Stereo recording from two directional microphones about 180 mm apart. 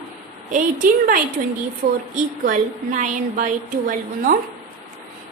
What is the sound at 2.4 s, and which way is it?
A woman's voice, 45° right (ahead or behind).